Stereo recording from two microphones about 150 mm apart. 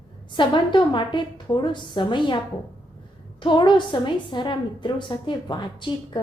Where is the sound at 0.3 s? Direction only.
30° left (ahead or behind).